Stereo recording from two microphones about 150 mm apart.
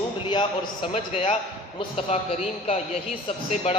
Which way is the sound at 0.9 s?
45° left (ahead or behind).